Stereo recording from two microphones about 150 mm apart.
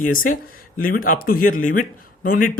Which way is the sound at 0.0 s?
65° left (ahead or behind).